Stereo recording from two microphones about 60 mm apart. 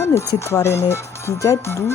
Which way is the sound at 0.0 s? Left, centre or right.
Left.